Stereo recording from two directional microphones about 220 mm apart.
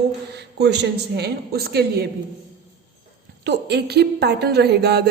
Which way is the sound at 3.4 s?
50° right (ahead or behind).